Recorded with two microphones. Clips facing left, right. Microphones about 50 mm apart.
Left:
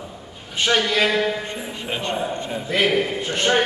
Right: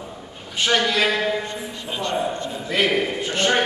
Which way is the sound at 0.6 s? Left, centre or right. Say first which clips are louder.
Even; centre.